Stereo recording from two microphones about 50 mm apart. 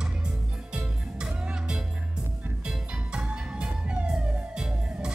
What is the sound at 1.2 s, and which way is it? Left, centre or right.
Music, centre.